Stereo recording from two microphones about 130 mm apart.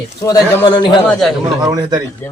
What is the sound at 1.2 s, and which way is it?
Speech, centre (ahead or behind).